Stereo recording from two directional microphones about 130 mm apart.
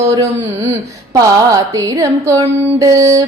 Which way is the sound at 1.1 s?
25° right (ahead or behind).